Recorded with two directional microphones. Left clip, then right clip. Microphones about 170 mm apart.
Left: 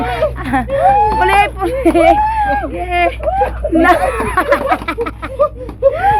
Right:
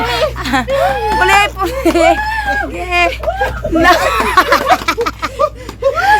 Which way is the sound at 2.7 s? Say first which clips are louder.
Right 1 dB; 15° right (ahead or behind).